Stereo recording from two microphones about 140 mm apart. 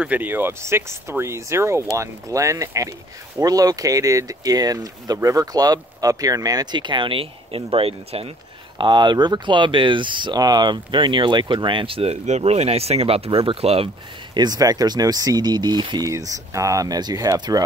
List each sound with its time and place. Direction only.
0.0 s speech: 10° right (ahead or behind); by 13.8 s 45° right (ahead or behind)
14.3 s speech: 30° right (ahead or behind)